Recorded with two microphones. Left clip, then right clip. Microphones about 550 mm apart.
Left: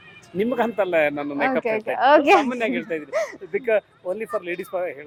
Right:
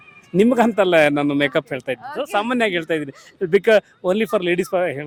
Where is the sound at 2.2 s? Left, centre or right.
Right.